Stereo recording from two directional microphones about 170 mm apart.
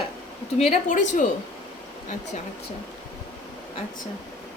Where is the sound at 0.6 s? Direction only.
45° left (ahead or behind).